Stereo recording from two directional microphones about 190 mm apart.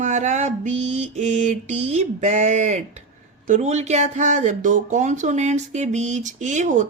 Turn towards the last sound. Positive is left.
turn(degrees=-40)  # may be behind; listen again after turning